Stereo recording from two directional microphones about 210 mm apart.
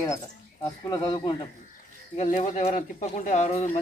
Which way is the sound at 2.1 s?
40° left (ahead or behind).